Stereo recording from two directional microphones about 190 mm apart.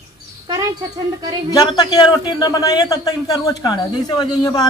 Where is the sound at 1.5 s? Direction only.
20° left (ahead or behind).